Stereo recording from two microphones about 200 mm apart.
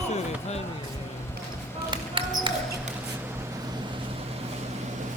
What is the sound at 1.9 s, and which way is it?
Basketball bounce, 25° right (ahead or behind).